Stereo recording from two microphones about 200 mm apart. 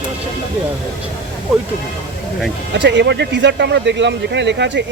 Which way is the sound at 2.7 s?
60° right (ahead or behind).